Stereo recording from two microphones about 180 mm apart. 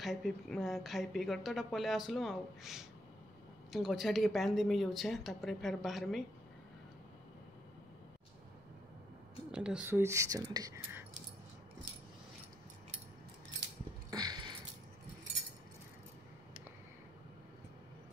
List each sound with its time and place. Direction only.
0.0 s speech: centre (ahead or behind)
9.5 s speech: 5° right (ahead or behind)
14.1 s a sound: 20° right (ahead or behind)